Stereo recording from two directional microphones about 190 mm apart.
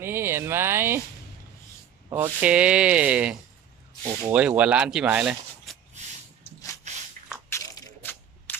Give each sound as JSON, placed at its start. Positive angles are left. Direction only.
{"t": 0.0, "sound": "speech", "side_deg": -10}
{"t": 2.0, "sound": "speech", "side_deg": -10}
{"t": 6.4, "sound": "rub", "side_deg": 15}
{"t": 7.5, "sound": "crushing", "side_deg": 10}